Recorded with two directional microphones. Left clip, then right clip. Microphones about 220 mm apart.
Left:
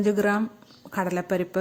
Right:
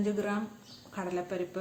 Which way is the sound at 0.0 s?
45° left (ahead or behind).